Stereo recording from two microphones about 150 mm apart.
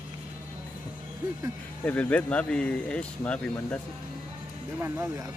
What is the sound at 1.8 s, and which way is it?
Speech, 10° left (ahead or behind).